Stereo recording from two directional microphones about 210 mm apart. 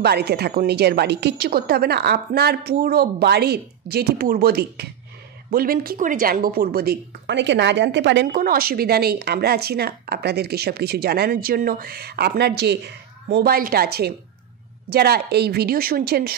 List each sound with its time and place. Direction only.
0.0 s speech: 50° right (ahead or behind)